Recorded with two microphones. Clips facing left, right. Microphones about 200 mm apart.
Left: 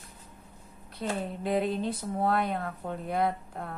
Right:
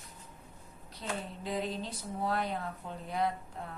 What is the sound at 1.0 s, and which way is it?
Speech, 60° left (ahead or behind).